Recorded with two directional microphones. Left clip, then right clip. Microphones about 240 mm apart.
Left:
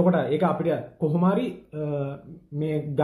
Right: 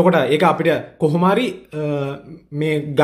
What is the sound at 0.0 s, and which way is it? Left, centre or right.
Speech, right.